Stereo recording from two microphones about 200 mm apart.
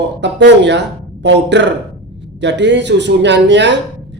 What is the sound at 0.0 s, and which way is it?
A man's voice, 60° right (ahead or behind).